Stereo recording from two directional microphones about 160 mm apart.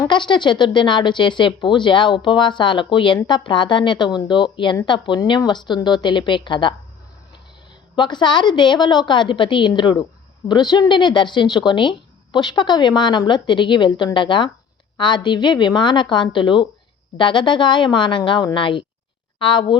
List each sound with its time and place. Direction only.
0.0 s speech: 30° left (ahead or behind)
7.9 s a woman's voice: 30° left (ahead or behind)